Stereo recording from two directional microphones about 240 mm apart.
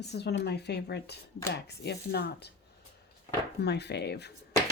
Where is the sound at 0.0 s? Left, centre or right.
Left.